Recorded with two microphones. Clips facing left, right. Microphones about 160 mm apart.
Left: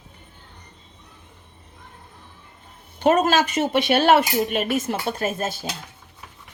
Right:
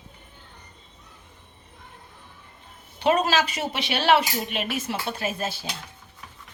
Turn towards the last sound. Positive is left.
turn(degrees=50)  # may be behind; listen again after turning